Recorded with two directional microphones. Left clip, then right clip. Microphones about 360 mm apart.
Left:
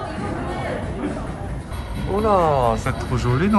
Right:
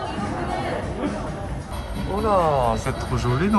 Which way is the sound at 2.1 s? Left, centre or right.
Centre.